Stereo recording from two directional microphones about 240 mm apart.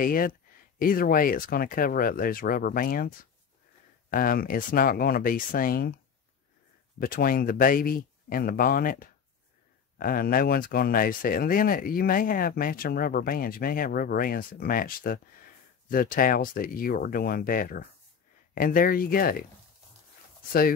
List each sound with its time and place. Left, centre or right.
0.0 s speech: left
7.0 s speech: left